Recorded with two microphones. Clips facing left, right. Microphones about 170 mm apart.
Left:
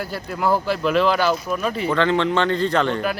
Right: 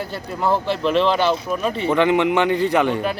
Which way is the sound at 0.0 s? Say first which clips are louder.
Even; 5° left (ahead or behind).